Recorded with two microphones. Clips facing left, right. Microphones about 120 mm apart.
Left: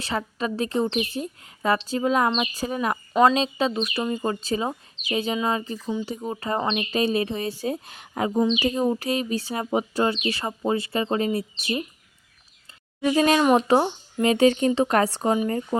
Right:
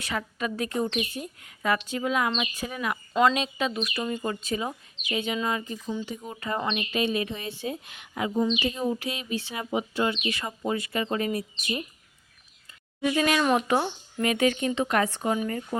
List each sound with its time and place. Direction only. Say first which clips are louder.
0.0 s a woman's voice: left 3 dB; 30° left (ahead or behind)
13.1 s a woman's voice: left 5 dB; 35° left (ahead or behind)